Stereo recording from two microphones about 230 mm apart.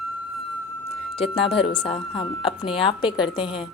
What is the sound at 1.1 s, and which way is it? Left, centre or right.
Speech, left.